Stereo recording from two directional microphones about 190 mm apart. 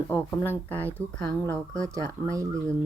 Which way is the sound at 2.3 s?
15° right (ahead or behind).